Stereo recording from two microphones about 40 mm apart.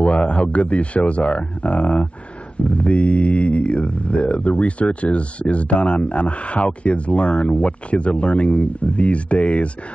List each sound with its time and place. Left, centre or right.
0.0 s speech: left